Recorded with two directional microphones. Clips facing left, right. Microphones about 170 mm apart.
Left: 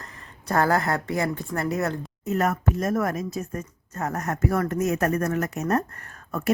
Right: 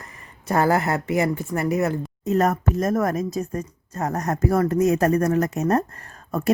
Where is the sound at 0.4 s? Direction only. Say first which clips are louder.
Right 2 dB; 15° right (ahead or behind).